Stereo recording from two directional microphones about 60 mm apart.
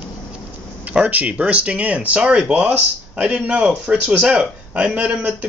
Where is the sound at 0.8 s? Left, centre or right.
Right.